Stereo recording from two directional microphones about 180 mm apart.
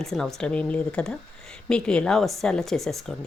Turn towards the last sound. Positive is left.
turn(degrees=0)  # may be behind; listen again after turning